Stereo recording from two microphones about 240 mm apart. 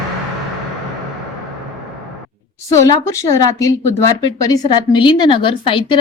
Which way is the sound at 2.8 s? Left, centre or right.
Centre.